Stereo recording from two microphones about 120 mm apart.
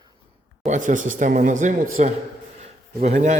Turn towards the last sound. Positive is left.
turn(degrees=-80)